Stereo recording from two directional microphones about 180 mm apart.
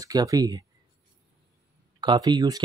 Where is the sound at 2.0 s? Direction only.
25° right (ahead or behind).